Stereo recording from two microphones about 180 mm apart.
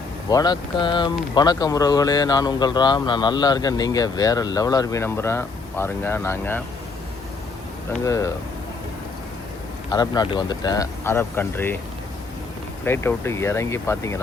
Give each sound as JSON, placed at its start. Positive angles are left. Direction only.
{"t": 0.3, "sound": "speech", "side_deg": 20}
{"t": 8.0, "sound": "speech", "side_deg": 20}
{"t": 9.9, "sound": "speech", "side_deg": 20}
{"t": 12.8, "sound": "speech", "side_deg": 10}